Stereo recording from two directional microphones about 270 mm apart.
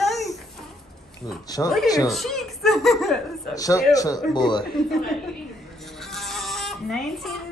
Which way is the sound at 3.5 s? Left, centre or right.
Centre.